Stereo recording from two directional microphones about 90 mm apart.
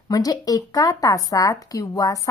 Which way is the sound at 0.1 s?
45° left (ahead or behind).